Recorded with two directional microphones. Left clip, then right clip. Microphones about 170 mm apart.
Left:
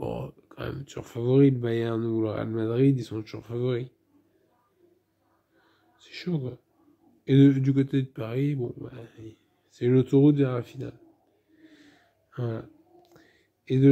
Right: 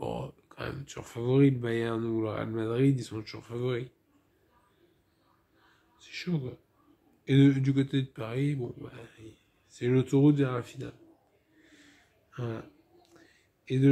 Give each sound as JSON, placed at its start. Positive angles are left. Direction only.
{"t": 0.0, "sound": "speech", "side_deg": 10}
{"t": 5.9, "sound": "speech", "side_deg": 25}
{"t": 7.2, "sound": "speech", "side_deg": 15}
{"t": 11.6, "sound": "whispering", "side_deg": 25}